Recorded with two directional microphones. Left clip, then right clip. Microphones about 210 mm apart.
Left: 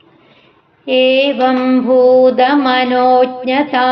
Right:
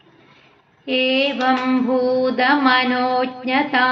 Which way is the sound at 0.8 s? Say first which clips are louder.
Left 7 dB; 45° left (ahead or behind).